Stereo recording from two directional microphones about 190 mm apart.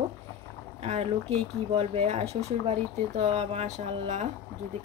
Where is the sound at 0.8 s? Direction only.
35° right (ahead or behind).